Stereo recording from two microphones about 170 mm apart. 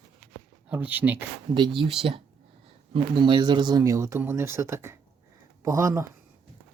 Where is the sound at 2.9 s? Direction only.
30° right (ahead or behind).